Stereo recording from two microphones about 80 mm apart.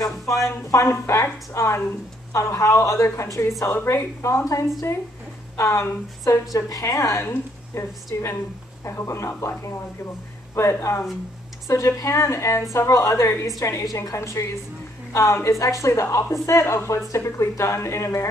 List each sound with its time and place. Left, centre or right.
0.2 s speech: centre
0.7 s a woman's voice: left
5.6 s a woman's voice: left
6.5 s a woman's voice: left
10.5 s a woman's voice: left